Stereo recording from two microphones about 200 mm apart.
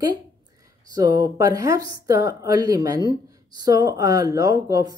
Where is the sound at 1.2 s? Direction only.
20° right (ahead or behind).